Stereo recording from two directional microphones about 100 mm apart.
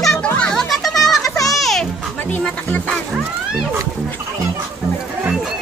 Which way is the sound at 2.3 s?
15° left (ahead or behind).